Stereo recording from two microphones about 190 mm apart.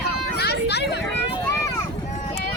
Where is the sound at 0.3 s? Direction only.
60° left (ahead or behind).